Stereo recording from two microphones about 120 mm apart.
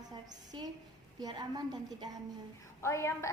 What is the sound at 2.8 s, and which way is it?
Speech, 25° left (ahead or behind).